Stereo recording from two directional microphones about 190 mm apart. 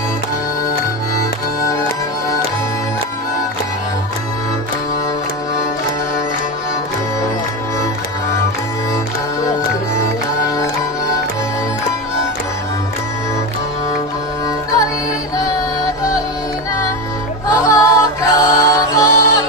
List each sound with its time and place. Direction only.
15.3 s music: 20° left (ahead or behind)
17.6 s music: 15° left (ahead or behind)